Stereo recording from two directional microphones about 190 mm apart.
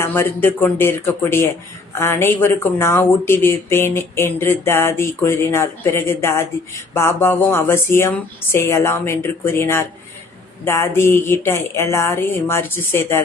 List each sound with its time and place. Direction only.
0.0 s speech: 10° left (ahead or behind)